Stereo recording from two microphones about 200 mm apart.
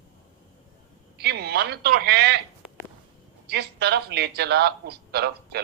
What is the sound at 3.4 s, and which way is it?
A man's voice, 55° right (ahead or behind).